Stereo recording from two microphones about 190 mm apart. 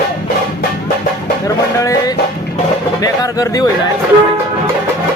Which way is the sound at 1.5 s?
20° left (ahead or behind).